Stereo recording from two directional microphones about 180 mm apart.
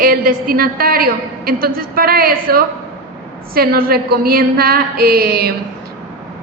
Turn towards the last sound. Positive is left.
turn(degrees=-60)  # may be behind; listen again after turning